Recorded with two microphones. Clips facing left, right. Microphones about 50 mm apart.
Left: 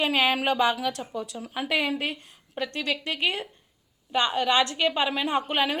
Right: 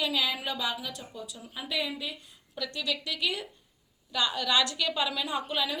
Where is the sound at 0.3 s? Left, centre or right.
Left.